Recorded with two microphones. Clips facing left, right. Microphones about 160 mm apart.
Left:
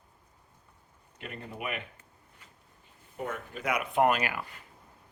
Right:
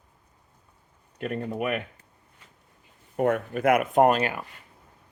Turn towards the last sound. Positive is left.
turn(degrees=-30)  # may be behind; listen again after turning